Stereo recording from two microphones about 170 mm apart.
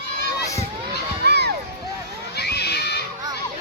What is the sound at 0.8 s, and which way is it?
Children shouting, 75° right (ahead or behind).